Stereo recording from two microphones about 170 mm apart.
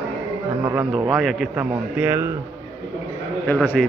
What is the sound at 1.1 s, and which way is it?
Speech, centre (ahead or behind).